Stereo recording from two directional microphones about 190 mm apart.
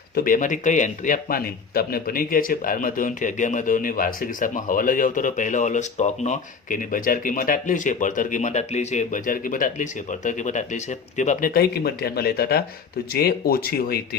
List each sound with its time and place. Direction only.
0.1 s speech: 50° left (ahead or behind)